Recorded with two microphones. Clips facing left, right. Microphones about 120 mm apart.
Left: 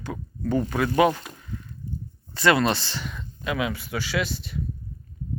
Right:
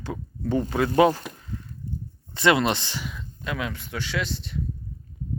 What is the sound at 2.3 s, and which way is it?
Speech, 20° right (ahead or behind).